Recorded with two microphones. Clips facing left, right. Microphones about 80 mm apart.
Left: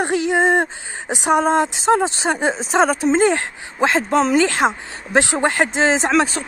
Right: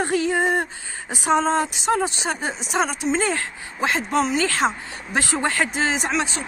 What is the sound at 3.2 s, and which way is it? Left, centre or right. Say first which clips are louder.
Speech: left 7 dB; left.